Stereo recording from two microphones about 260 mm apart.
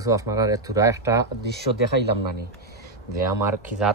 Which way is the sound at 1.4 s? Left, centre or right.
Right.